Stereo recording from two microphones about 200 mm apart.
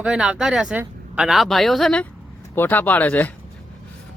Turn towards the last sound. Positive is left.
turn(degrees=10)  # may be behind; listen again after turning